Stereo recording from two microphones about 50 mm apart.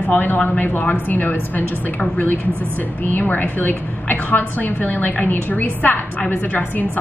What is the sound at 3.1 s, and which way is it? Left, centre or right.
A woman's voice, left.